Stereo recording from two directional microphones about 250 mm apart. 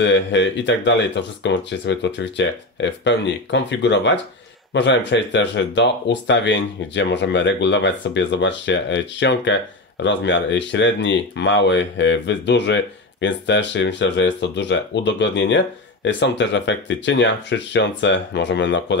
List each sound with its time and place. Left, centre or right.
0.0 s speech: left